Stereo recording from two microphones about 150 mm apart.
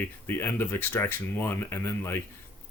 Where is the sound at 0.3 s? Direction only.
15° left (ahead or behind).